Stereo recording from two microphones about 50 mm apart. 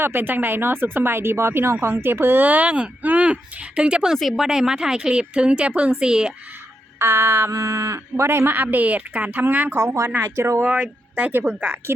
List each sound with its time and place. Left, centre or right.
0.0 s speech: right
2.5 s speech: right
7.0 s speech: right
8.4 s a woman's voice: right
9.6 s speech: right
10.2 s speech: right
10.7 s speech: right
11.6 s speech: right